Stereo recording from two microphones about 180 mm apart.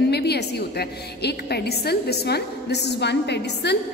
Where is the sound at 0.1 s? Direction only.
65° left (ahead or behind).